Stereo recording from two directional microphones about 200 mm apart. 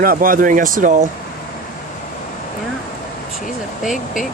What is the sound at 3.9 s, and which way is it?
Speech, 40° left (ahead or behind).